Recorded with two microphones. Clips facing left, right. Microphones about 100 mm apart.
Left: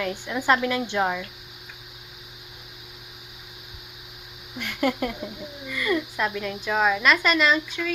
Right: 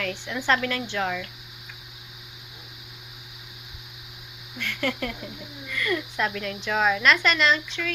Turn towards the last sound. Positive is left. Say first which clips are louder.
# left 2 dB
turn(degrees=10)  # may be behind; listen again after turning